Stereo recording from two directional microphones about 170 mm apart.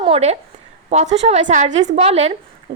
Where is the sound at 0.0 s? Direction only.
35° right (ahead or behind).